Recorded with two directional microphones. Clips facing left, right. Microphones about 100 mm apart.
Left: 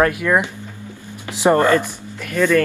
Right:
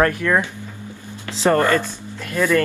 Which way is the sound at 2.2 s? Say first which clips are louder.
Left 2 dB; 15° right (ahead or behind).